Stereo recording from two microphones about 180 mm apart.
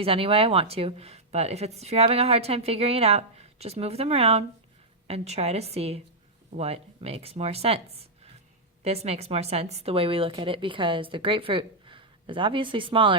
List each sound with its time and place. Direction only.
0.0 s speech: 30° right (ahead or behind)